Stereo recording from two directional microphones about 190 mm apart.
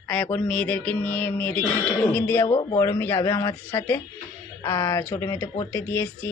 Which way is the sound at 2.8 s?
10° left (ahead or behind).